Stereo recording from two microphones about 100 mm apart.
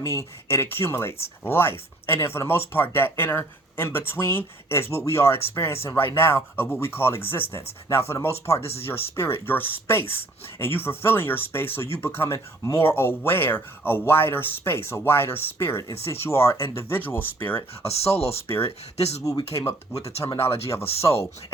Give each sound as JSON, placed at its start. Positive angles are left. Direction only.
{"t": 0.0, "sound": "speech", "side_deg": 25}
{"t": 17.8, "sound": "speech", "side_deg": 90}
{"t": 18.4, "sound": "speech", "side_deg": 20}
{"t": 18.9, "sound": "speech", "side_deg": 90}
{"t": 20.4, "sound": "speech", "side_deg": 80}